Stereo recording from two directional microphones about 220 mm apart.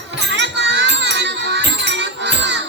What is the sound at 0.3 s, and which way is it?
Music, 55° right (ahead or behind).